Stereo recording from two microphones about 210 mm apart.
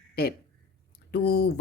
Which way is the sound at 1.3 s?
50° left (ahead or behind).